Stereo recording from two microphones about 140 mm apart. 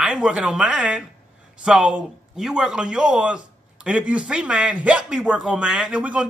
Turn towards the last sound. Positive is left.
turn(degrees=-10)  # may be behind; listen again after turning